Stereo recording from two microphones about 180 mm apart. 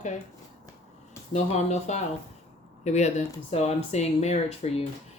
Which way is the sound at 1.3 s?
40° left (ahead or behind).